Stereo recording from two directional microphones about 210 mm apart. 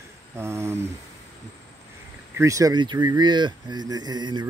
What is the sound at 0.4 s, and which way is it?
Speech, 10° right (ahead or behind).